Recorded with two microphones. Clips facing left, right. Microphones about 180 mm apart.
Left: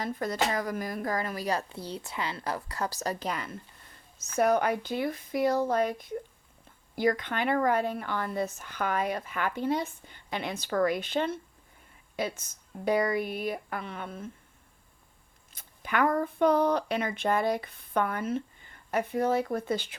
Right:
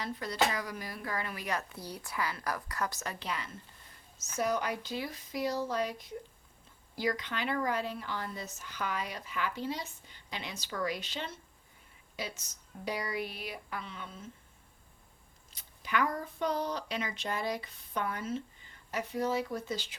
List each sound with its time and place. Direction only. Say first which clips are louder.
0.0 s speech: left 3 dB; 50° left (ahead or behind)
4.2 s speech: left 7 dB; 60° left (ahead or behind)
15.5 s speech: left 3 dB; 55° left (ahead or behind)